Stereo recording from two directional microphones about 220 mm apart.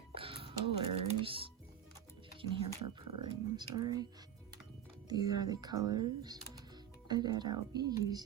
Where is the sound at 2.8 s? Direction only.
20° right (ahead or behind).